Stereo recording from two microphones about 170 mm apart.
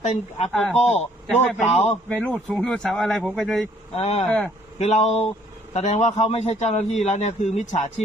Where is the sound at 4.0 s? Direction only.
35° left (ahead or behind).